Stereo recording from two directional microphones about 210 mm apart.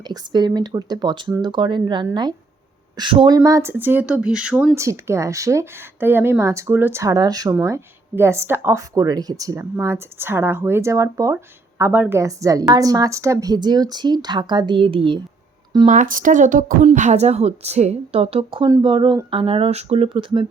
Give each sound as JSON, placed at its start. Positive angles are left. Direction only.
{"t": 0.1, "sound": "speech", "side_deg": -20}
{"t": 15.9, "sound": "speech", "side_deg": -40}